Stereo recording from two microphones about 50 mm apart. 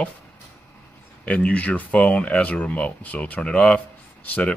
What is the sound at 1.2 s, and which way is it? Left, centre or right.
Speech, left.